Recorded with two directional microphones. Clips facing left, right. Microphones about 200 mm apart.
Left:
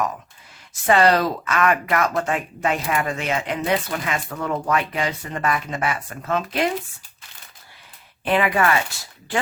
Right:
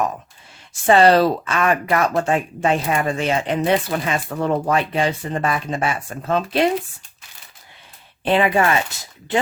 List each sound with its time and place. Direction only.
0.7 s speech: 30° right (ahead or behind)
8.2 s speech: 30° right (ahead or behind)